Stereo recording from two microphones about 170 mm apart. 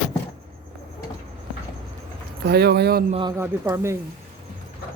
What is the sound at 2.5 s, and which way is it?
Speech, 70° right (ahead or behind).